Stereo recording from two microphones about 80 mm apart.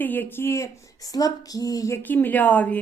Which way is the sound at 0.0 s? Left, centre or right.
Left.